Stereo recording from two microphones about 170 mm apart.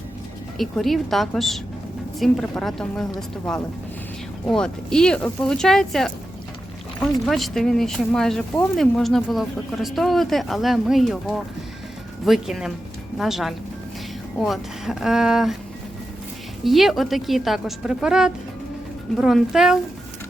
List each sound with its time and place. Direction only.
0.6 s speech: centre (ahead or behind)
7.1 s speech: centre (ahead or behind)
16.6 s speech: centre (ahead or behind)